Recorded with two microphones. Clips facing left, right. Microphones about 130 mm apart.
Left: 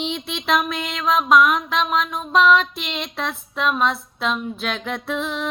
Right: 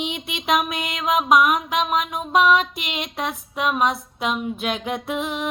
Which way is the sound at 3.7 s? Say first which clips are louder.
Even; 10° right (ahead or behind).